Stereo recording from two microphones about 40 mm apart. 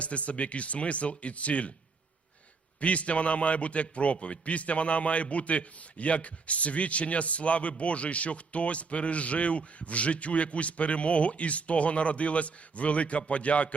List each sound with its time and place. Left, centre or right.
0.0 s a man's voice: left
2.8 s a man's voice: left